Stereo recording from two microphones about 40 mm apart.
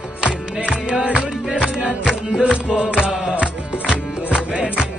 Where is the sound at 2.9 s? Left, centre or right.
Right.